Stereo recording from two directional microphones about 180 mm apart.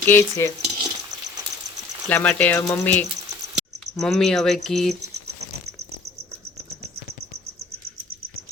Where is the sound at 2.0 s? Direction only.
10° left (ahead or behind).